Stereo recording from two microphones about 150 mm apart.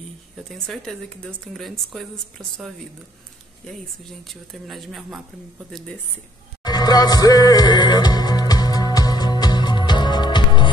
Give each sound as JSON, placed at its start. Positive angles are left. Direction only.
{"t": 0.5, "sound": "speech", "side_deg": 0}
{"t": 4.2, "sound": "speech", "side_deg": 0}
{"t": 6.6, "sound": "music", "side_deg": 25}